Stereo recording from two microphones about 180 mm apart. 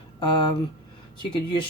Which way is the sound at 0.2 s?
25° left (ahead or behind).